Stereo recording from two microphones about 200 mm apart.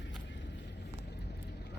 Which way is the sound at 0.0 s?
60° left (ahead or behind).